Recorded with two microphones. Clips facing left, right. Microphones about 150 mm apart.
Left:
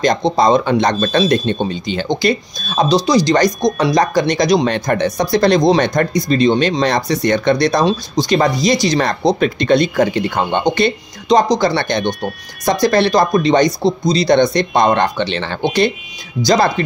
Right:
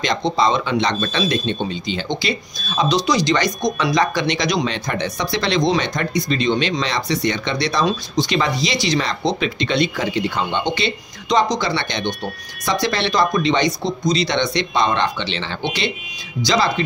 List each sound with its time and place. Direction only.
0.0 s speech: 45° left (ahead or behind)
2.9 s speech: 35° left (ahead or behind)
11.2 s speech: 35° left (ahead or behind)
11.7 s speech: 50° left (ahead or behind)